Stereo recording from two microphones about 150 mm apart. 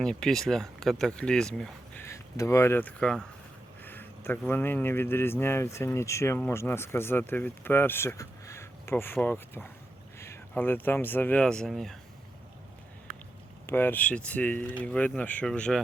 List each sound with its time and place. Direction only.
0.0 s speech: 5° left (ahead or behind)
2.0 s speech: 20° left (ahead or behind); by 11.9 s centre (ahead or behind)
13.7 s speech: 15° left (ahead or behind)